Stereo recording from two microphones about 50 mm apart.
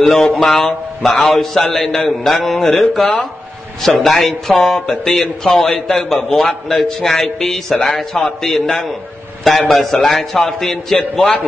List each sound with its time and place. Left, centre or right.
0.0 s a man's voice: centre
3.8 s a man's voice: centre